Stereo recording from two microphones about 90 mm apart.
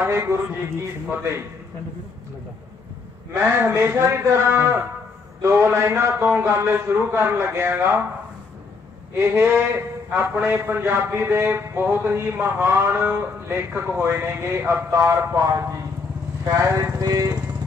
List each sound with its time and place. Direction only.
0.0 s speech: 30° right (ahead or behind)
3.4 s a man's voice: 30° right (ahead or behind)
9.2 s a man's voice: 25° right (ahead or behind); by 17.4 s 40° right (ahead or behind)